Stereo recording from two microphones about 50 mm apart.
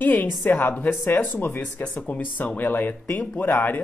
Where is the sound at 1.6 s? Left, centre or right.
Left.